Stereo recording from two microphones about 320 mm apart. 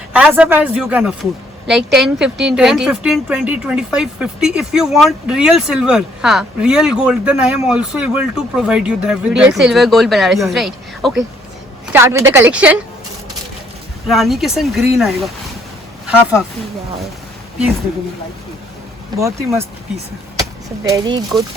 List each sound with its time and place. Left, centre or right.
0.1 s a woman's voice: centre
14.1 s speech: centre
19.2 s a woman's voice: centre
20.8 s a woman's voice: centre